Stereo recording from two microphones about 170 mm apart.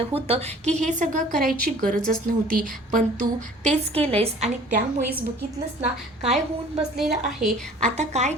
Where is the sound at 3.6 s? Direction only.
40° right (ahead or behind).